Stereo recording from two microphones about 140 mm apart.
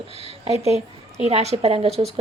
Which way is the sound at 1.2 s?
50° right (ahead or behind).